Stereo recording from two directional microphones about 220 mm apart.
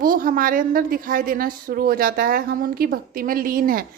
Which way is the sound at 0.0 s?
40° right (ahead or behind).